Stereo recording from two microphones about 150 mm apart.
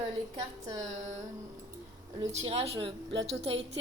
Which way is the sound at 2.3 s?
45° right (ahead or behind).